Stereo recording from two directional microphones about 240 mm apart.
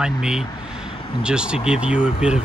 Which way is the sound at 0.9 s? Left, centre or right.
Left.